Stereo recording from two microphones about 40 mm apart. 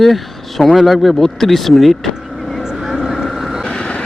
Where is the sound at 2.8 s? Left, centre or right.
Centre.